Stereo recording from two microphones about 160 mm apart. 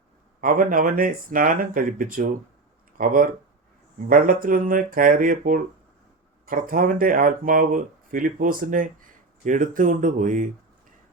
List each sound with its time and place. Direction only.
0.4 s speech: 60° right (ahead or behind)